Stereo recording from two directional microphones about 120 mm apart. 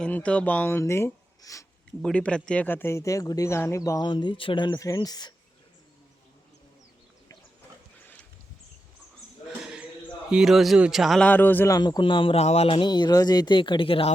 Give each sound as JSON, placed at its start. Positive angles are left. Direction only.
{"t": 0.0, "sound": "speech", "side_deg": 10}
{"t": 2.0, "sound": "speech", "side_deg": 10}
{"t": 4.0, "sound": "speech", "side_deg": 40}
{"t": 9.5, "sound": "a sound", "side_deg": -10}
{"t": 10.3, "sound": "a man's voice", "side_deg": -5}
{"t": 11.3, "sound": "speech", "side_deg": 15}
{"t": 11.7, "sound": "speech", "side_deg": 35}